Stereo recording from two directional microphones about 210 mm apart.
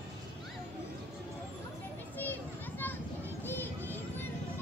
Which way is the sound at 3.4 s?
10° left (ahead or behind).